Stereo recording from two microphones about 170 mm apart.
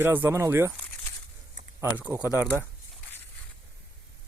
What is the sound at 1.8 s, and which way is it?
Speech, 10° right (ahead or behind).